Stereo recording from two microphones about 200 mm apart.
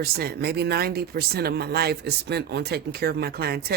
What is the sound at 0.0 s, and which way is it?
Speech, 50° right (ahead or behind).